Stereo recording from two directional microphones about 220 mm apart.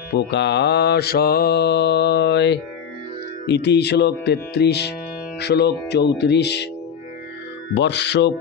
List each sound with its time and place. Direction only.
0.1 s mantra: 50° left (ahead or behind)
7.7 s mantra: 50° left (ahead or behind)